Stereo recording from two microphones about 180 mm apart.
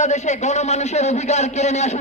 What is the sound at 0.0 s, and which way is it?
Speech, 40° left (ahead or behind).